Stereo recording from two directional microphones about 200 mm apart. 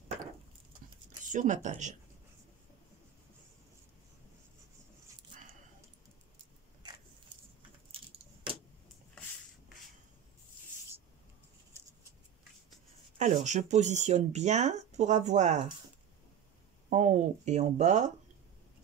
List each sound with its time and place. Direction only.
1.3 s speech: 40° right (ahead or behind)
13.2 s speech: 35° right (ahead or behind)
16.9 s speech: 35° right (ahead or behind)